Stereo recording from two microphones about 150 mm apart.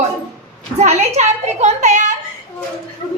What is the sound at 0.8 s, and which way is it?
A child's voice, 50° right (ahead or behind).